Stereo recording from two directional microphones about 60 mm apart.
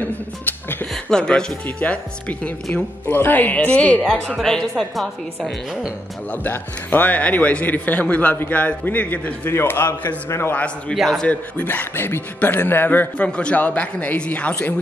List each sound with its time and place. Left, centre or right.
1.1 s speech: centre
1.8 s speech: left
3.1 s speech: left
4.4 s speech: centre
6.3 s speech: left
9.5 s a man's voice: left
10.5 s a man's voice: left